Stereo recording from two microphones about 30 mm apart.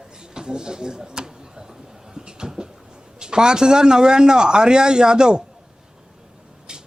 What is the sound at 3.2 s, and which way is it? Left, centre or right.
A man's voice, right.